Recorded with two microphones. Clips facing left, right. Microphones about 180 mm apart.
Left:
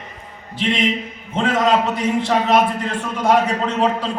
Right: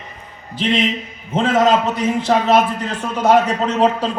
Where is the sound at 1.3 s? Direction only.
40° right (ahead or behind).